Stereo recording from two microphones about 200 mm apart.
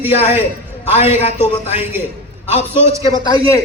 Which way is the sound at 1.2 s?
30° left (ahead or behind).